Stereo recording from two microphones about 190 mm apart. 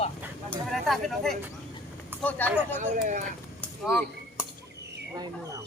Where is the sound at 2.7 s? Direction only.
40° right (ahead or behind).